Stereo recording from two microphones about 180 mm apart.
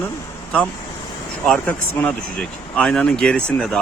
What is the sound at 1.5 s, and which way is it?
Speech, 5° left (ahead or behind).